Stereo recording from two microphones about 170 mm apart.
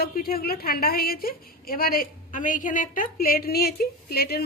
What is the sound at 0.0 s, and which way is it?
A woman's voice, 60° left (ahead or behind).